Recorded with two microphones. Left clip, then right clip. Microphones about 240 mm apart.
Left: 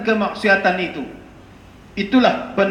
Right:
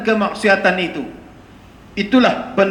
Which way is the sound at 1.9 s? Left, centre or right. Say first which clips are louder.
Right 1 dB; right.